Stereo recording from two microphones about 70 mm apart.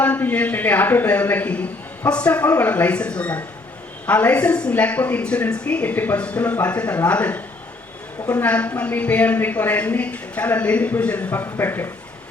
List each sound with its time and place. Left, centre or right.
0.0 s speech: left